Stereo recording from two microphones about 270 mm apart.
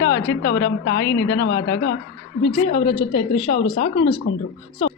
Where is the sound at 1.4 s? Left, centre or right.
Left.